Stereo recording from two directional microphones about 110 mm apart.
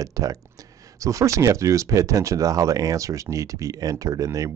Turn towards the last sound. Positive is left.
turn(degrees=-30)  # may be behind; listen again after turning